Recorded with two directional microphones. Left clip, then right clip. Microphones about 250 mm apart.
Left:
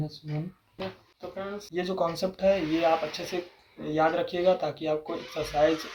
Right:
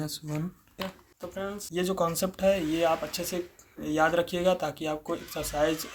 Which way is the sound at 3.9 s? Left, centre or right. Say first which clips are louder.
Even; right.